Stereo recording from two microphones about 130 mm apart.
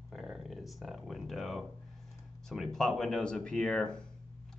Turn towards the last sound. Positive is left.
turn(degrees=5)  # may be behind; listen again after turning